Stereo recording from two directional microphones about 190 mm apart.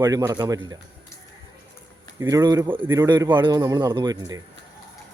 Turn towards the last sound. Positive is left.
turn(degrees=-20)  # may be behind; listen again after turning